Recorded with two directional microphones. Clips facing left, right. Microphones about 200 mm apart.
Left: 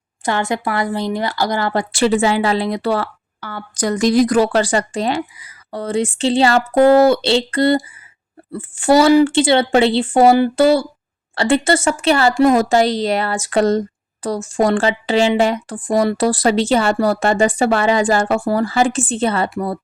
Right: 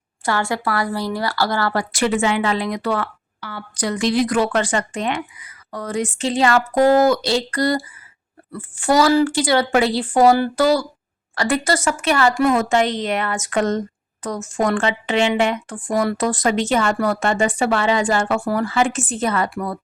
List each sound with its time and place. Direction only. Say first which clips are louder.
0.3 s a woman's voice: left 2 dB; 20° left (ahead or behind)
3.4 s a woman's voice: left 4 dB; 45° left (ahead or behind)